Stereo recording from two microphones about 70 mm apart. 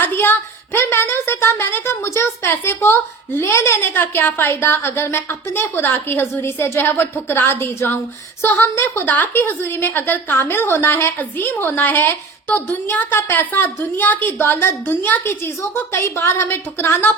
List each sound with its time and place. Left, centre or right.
0.0 s a woman's voice: left
9.0 s a woman's voice: left
15.3 s a woman's voice: left